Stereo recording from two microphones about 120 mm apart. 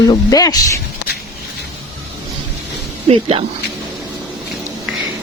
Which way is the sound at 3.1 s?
55° right (ahead or behind).